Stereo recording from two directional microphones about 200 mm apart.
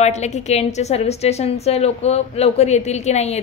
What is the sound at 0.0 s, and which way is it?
A woman's voice, 35° left (ahead or behind).